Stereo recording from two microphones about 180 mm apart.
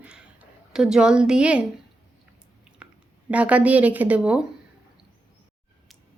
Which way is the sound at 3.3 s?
5° right (ahead or behind).